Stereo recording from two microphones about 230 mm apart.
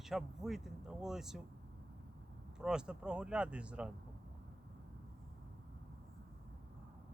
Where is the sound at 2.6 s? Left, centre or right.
Centre.